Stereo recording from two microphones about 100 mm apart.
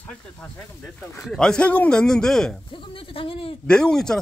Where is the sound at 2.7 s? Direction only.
60° left (ahead or behind).